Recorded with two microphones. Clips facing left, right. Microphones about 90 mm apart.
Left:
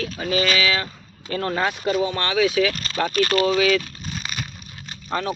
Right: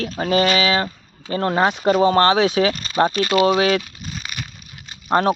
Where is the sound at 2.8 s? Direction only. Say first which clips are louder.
Right 3 dB; 20° right (ahead or behind).